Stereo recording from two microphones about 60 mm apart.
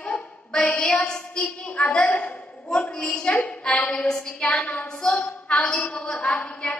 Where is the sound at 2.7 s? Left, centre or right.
Centre.